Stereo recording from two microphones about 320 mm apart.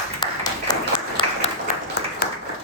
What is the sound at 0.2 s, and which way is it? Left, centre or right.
Applause, centre.